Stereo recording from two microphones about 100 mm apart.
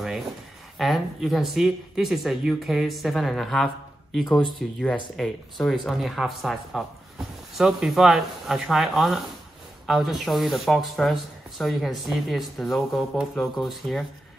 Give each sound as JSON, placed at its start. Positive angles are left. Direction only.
{"t": 0.7, "sound": "speech", "side_deg": 0}